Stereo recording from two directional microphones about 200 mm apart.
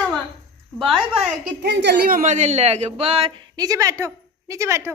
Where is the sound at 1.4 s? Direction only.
55° right (ahead or behind).